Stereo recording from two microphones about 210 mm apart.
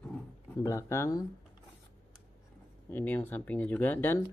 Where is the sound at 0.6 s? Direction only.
15° left (ahead or behind).